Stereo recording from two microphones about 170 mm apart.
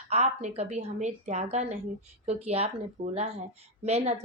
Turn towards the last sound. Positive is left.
turn(degrees=-40)  # may be behind; listen again after turning